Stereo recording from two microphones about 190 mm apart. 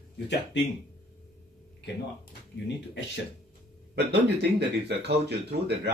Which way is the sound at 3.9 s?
60° right (ahead or behind).